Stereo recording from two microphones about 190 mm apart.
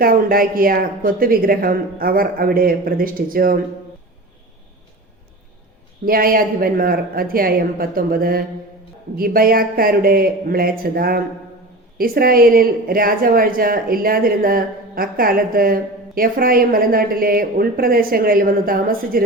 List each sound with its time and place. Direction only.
0.0 s a woman's voice: 50° right (ahead or behind)
6.1 s a woman's voice: 50° right (ahead or behind)